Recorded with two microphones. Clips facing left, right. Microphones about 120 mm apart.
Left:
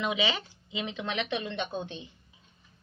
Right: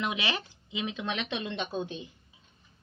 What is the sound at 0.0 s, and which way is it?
A woman's voice, 10° right (ahead or behind).